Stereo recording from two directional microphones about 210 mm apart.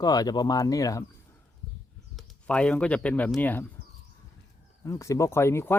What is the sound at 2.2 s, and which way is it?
Speech, 5° left (ahead or behind).